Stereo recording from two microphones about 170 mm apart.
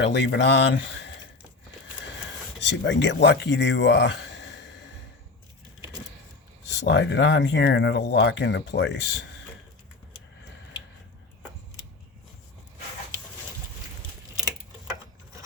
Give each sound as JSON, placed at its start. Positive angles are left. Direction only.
{"t": 0.0, "sound": "speech", "side_deg": 85}
{"t": 2.6, "sound": "speech", "side_deg": 90}
{"t": 6.7, "sound": "speech", "side_deg": 90}